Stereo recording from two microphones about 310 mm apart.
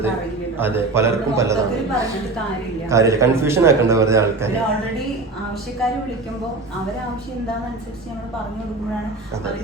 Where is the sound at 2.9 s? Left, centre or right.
Centre.